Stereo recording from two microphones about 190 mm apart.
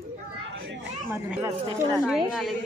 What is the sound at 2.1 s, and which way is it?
Speech, centre (ahead or behind).